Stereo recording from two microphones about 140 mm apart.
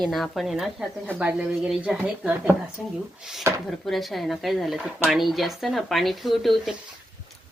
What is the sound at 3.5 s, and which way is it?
Speech, 20° right (ahead or behind).